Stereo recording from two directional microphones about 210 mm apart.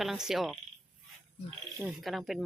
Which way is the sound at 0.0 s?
Centre (ahead or behind).